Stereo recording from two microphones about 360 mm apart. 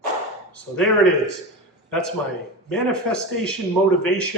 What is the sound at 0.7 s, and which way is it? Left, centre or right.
Speech, centre.